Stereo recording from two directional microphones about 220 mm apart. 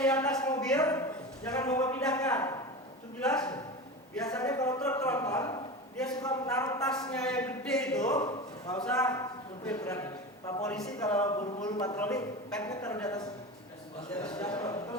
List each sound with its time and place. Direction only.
0.0 s speech: 5° left (ahead or behind)
8.0 s a man's voice: 15° left (ahead or behind)